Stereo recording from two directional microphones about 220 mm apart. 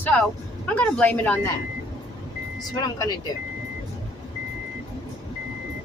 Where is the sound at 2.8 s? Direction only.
15° left (ahead or behind).